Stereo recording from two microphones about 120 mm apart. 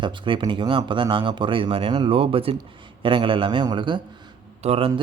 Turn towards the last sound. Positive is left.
turn(degrees=-55)  # may be behind; listen again after turning